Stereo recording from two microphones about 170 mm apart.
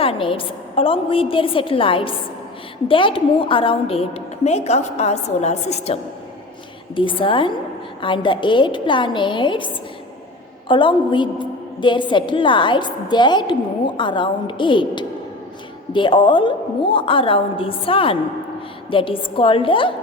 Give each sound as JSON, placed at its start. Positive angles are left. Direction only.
{"t": 0.0, "sound": "a woman's voice", "side_deg": 30}
{"t": 10.7, "sound": "a woman's voice", "side_deg": 30}